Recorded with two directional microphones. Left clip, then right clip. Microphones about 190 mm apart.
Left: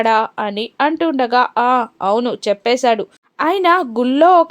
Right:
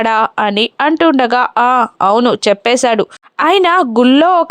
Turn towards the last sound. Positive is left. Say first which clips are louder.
# right 2 dB
turn(degrees=-25)  # may be behind; listen again after turning